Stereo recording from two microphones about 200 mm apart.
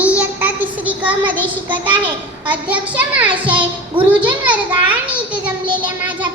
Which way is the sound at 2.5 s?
5° right (ahead or behind).